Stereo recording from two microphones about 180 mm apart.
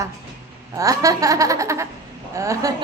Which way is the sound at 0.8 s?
20° right (ahead or behind).